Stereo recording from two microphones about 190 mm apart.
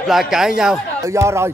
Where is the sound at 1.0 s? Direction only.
15° right (ahead or behind).